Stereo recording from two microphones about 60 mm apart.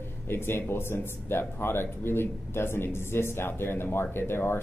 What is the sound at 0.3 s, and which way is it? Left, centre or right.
Speech, left.